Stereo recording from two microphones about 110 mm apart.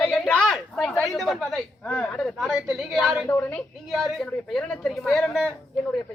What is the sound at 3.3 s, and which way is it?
Speech, 15° left (ahead or behind).